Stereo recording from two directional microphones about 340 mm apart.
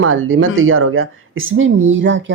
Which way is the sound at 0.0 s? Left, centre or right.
Right.